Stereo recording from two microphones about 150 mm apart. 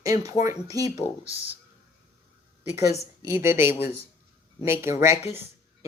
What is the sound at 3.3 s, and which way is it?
Speech, 15° right (ahead or behind).